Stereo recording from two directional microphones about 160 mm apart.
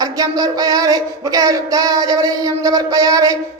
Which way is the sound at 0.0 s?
25° right (ahead or behind).